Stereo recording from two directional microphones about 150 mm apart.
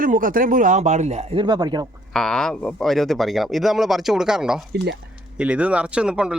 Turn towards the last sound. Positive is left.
turn(degrees=-5)  # may be behind; listen again after turning